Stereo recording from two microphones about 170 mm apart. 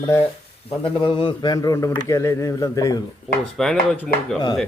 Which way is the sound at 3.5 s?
Centre (ahead or behind).